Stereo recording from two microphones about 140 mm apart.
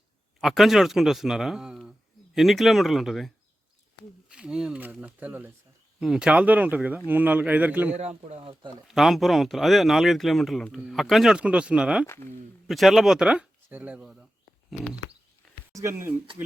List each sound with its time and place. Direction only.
0.4 s speech: centre (ahead or behind)
7.9 s speech: 50° right (ahead or behind)
8.9 s speech: centre (ahead or behind)
12.0 s speech: 20° left (ahead or behind)
12.6 s speech: centre (ahead or behind)
15.7 s speech: 20° right (ahead or behind)